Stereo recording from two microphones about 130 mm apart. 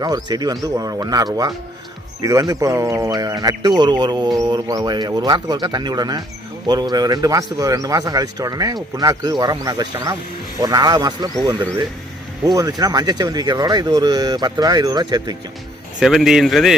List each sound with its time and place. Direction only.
0.0 s speech: 30° right (ahead or behind)
12.5 s speech: 25° right (ahead or behind)
16.0 s speech: 5° right (ahead or behind)